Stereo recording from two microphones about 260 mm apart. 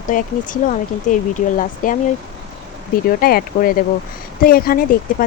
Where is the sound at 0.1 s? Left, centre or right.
Left.